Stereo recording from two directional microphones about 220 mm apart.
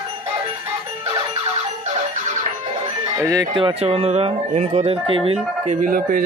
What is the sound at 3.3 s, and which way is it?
Speech, 20° right (ahead or behind).